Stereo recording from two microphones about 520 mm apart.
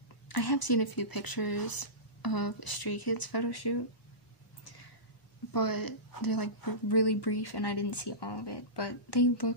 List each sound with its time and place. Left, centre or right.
0.3 s speech: left
5.5 s speech: left